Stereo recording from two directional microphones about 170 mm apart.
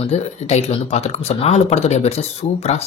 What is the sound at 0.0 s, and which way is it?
Speech, 40° left (ahead or behind).